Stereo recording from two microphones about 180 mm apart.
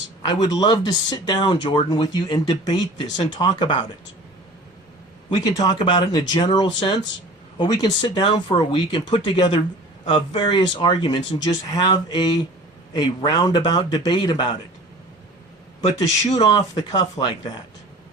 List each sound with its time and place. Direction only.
0.3 s speech: 20° left (ahead or behind)
5.3 s speech: 20° left (ahead or behind)
16.4 s speech: 25° left (ahead or behind)